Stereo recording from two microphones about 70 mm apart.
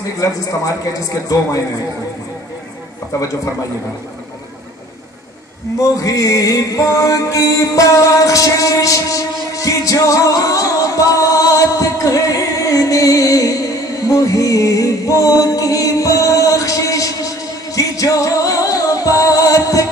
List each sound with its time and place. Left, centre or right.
5.8 s music: left